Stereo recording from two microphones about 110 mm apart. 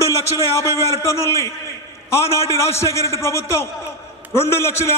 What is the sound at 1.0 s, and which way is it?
A man's voice, 25° left (ahead or behind).